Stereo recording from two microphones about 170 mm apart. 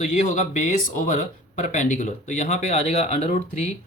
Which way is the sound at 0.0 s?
45° left (ahead or behind).